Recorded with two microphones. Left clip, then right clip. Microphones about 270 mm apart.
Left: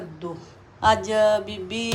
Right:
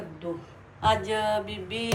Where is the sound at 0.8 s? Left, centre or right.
Centre.